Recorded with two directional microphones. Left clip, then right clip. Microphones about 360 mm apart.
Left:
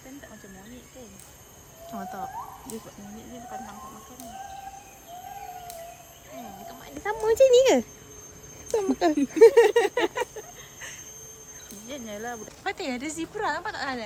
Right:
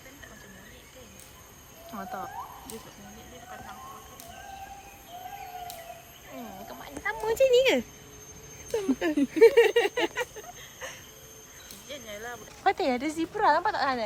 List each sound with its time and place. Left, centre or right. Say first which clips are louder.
1.9 s speech: left 1 dB; centre
6.7 s speech: right 1 dB; centre
7.1 s a sound: left 4 dB; left
10.8 s a sound: even; centre
11.9 s speech: left 3 dB; left
12.6 s a woman's voice: right 6 dB; centre